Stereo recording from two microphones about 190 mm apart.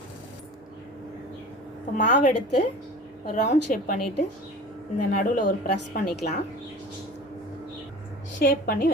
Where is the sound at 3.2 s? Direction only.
40° left (ahead or behind).